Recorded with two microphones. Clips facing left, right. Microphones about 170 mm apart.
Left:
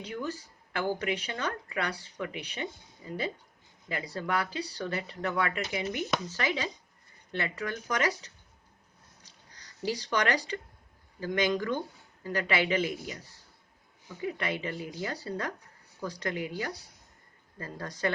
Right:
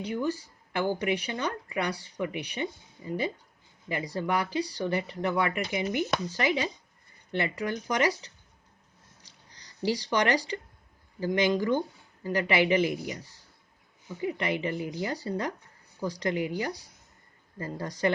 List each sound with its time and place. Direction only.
0.0 s speech: 10° right (ahead or behind)
3.8 s speech: 15° right (ahead or behind)
9.9 s speech: 15° right (ahead or behind)
14.3 s speech: 15° right (ahead or behind)